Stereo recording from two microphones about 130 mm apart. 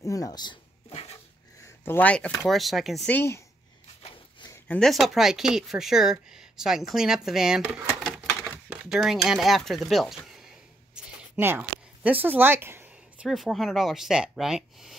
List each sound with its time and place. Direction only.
0.0 s a sound: 25° left (ahead or behind)
1.9 s speech: 10° left (ahead or behind)
3.1 s speech: 20° left (ahead or behind)
4.6 s speech: 5° left (ahead or behind)
8.6 s speech: 5° right (ahead or behind)
11.0 s a sound: 5° right (ahead or behind)
13.3 s speech: centre (ahead or behind)